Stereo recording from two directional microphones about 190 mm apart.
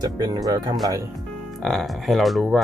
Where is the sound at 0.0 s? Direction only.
20° right (ahead or behind).